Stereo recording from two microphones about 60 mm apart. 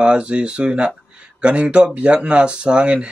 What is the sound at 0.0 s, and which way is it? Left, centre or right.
Speech, centre.